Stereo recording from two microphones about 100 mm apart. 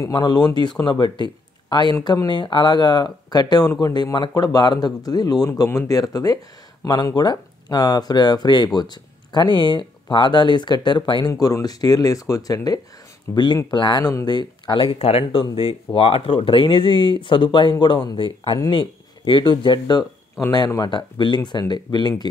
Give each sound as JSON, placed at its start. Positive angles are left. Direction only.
{"t": 0.1, "sound": "speech", "side_deg": 45}
{"t": 11.3, "sound": "speech", "side_deg": 40}